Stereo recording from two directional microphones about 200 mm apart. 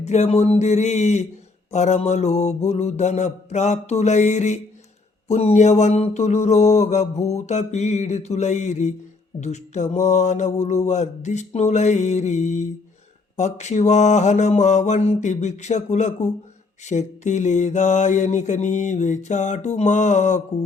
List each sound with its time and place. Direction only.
0.0 s mantra: 35° left (ahead or behind)